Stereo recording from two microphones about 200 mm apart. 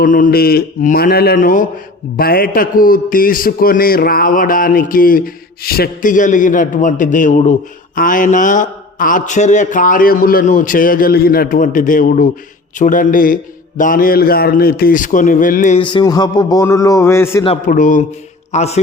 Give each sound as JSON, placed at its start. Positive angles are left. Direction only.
{"t": 0.0, "sound": "a man's voice", "side_deg": 45}
{"t": 15.8, "sound": "speech", "side_deg": 25}
{"t": 17.7, "sound": "speech", "side_deg": 40}